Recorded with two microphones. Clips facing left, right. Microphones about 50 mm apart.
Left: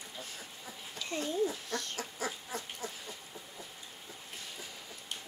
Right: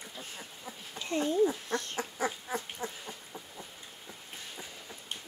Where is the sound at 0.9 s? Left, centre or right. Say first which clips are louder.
Right 5 dB; right.